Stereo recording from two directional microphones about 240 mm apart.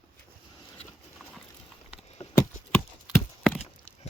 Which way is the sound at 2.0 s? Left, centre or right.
Left.